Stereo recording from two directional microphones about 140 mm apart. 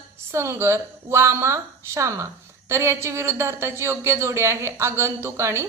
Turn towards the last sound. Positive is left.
turn(degrees=-20)  # may be behind; listen again after turning